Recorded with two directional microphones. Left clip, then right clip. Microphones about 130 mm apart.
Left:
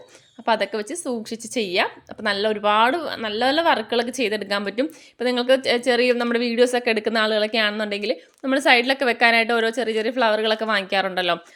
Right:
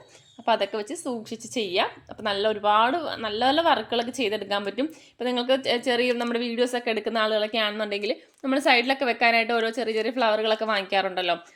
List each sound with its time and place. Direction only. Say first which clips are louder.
0.4 s a woman's voice: left 2 dB; 40° left (ahead or behind)